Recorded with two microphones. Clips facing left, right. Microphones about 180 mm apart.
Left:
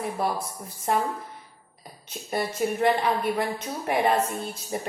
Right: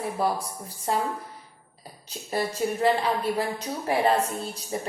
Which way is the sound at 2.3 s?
30° right (ahead or behind).